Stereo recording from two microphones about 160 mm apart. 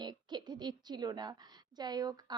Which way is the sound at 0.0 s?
25° right (ahead or behind).